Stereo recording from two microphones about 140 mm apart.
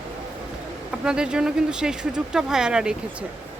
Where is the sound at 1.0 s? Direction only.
5° right (ahead or behind).